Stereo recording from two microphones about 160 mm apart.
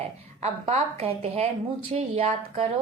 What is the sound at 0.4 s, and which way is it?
Speech, 40° right (ahead or behind).